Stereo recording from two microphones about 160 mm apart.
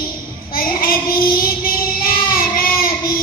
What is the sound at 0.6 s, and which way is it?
Child singing, 65° left (ahead or behind).